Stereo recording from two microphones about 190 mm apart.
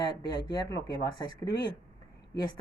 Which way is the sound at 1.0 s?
20° left (ahead or behind).